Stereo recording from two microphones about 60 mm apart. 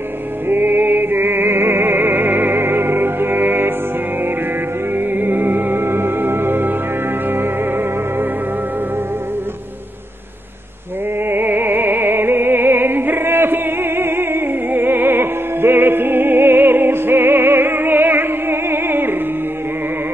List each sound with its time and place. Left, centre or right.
0.5 s music: right
4.9 s music: right
11.2 s opera: right